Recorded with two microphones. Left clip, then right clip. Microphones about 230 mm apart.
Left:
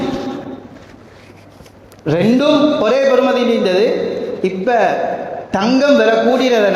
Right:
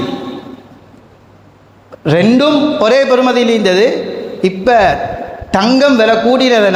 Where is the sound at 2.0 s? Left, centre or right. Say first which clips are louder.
Right 3 dB; right.